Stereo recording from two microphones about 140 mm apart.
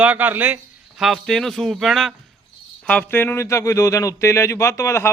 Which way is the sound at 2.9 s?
10° left (ahead or behind).